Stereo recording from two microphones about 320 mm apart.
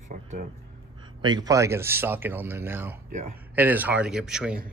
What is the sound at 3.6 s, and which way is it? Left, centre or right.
Speech, centre.